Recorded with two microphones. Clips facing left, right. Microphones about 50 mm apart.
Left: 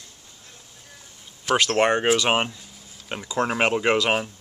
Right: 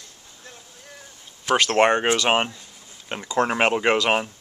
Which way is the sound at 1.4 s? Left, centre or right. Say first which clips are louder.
Right 1 dB; centre.